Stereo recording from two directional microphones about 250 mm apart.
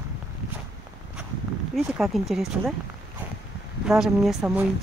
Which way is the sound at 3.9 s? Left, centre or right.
Centre.